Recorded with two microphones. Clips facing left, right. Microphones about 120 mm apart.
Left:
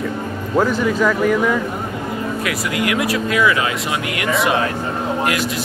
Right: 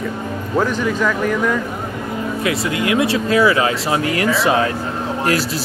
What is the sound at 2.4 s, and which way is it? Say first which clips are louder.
Speech: right 3 dB; 25° right (ahead or behind).